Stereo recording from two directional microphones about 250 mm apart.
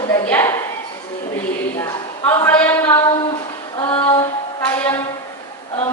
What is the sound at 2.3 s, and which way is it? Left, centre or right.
Speech, centre.